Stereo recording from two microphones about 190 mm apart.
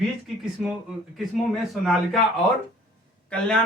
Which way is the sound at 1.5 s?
Centre (ahead or behind).